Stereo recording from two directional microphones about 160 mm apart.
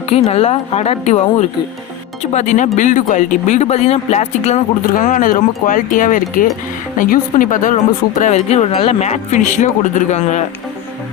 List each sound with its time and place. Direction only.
0.1 s a woman's voice: 40° left (ahead or behind)